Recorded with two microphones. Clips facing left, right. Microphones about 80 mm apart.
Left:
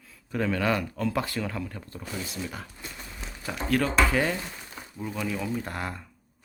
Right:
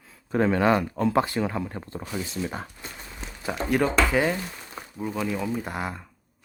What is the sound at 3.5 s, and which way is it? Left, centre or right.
Speech, centre.